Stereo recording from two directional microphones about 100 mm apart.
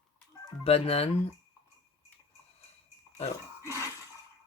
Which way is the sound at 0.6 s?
85° left.